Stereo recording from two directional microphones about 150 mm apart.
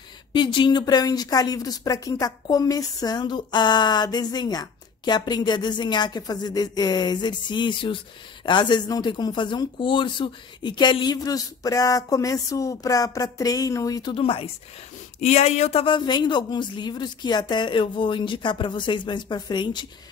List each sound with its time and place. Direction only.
0.3 s a woman's voice: 30° left (ahead or behind)
14.1 s a woman's voice: 35° left (ahead or behind)
15.8 s a woman's voice: 30° left (ahead or behind)